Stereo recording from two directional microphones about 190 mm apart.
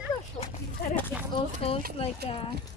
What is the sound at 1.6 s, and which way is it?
Speech, 30° left (ahead or behind).